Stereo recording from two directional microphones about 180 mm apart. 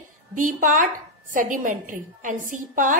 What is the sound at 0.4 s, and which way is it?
A woman's voice, 50° right (ahead or behind).